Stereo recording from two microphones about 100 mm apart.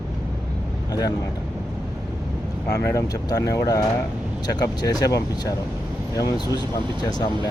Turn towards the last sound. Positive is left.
turn(degrees=45)  # may be behind; listen again after turning